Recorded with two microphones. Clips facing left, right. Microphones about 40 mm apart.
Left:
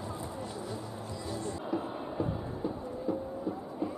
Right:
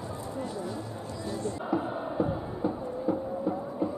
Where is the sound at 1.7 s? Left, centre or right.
Right.